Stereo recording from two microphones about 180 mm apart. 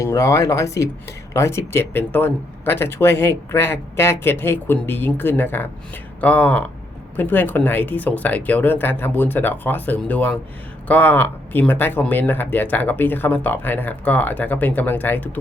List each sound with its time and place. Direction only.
0.0 s speech: 15° left (ahead or behind)